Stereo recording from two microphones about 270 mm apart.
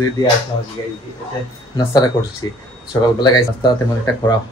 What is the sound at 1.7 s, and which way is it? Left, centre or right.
Speech, centre.